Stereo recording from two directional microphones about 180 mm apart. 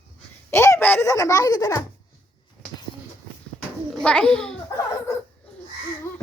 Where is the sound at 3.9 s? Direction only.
5° left (ahead or behind).